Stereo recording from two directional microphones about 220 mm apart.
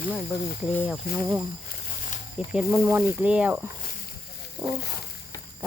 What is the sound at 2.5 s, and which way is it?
Speech, 10° right (ahead or behind).